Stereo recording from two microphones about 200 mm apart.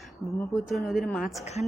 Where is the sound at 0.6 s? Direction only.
Centre (ahead or behind).